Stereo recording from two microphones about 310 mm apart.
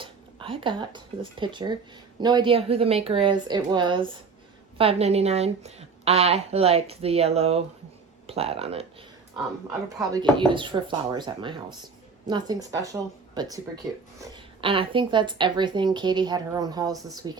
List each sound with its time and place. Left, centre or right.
0.0 s a woman's voice: centre